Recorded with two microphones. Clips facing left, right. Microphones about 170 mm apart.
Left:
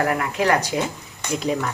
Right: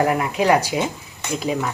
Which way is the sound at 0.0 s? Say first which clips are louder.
Right 2 dB; 15° right (ahead or behind).